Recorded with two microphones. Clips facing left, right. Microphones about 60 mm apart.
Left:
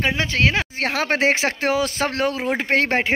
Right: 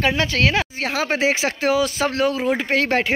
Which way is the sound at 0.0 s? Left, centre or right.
Left.